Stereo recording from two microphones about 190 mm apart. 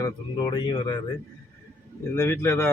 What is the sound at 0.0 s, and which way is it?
Speech, 20° left (ahead or behind).